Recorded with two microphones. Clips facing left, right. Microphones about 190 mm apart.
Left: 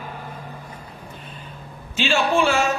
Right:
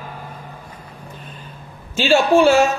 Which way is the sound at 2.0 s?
40° right (ahead or behind).